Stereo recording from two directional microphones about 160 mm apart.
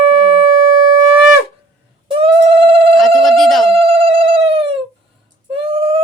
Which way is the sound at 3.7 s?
35° right (ahead or behind).